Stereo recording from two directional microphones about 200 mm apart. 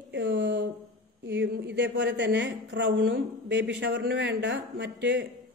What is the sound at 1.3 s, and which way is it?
A woman's voice, 60° right (ahead or behind).